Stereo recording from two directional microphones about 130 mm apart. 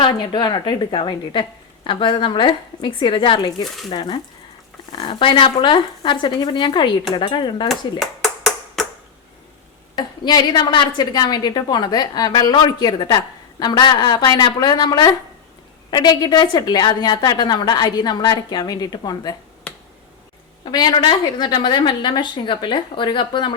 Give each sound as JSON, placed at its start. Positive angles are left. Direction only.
{"t": 0.0, "sound": "a woman's voice", "side_deg": 40}
{"t": 7.7, "sound": "clapping", "side_deg": 0}
{"t": 9.9, "sound": "a woman's voice", "side_deg": 35}
{"t": 20.7, "sound": "a woman's voice", "side_deg": 35}